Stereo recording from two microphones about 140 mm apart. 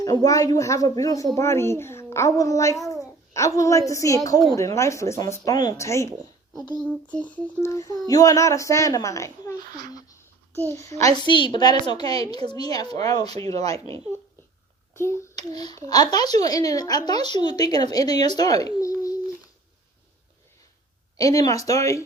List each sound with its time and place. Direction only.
0.0 s a woman's voice: 25° left (ahead or behind)
6.7 s a sound: 10° left (ahead or behind)
7.4 s a woman's voice: 20° left (ahead or behind)
10.7 s a woman's voice: 20° left (ahead or behind)
13.2 s speech: 45° right (ahead or behind)
14.9 s a woman's voice: 20° left (ahead or behind)
21.2 s a woman's voice: 25° left (ahead or behind)